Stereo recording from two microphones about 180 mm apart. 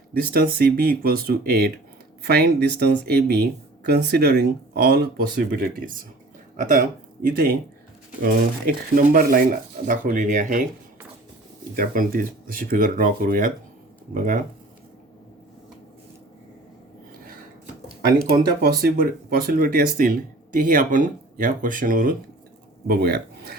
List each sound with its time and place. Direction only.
0.3 s speech: 55° right (ahead or behind)
11.8 s speech: 50° right (ahead or behind)
18.3 s speech: 60° right (ahead or behind)
22.9 s speech: 60° right (ahead or behind)